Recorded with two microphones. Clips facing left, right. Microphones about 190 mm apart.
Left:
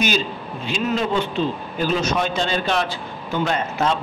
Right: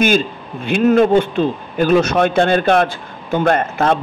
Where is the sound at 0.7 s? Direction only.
55° right (ahead or behind).